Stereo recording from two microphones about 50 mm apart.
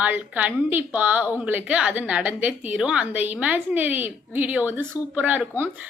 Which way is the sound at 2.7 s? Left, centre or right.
Right.